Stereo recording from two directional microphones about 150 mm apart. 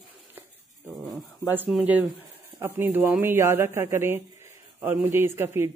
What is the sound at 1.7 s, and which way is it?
A woman's voice, 5° right (ahead or behind).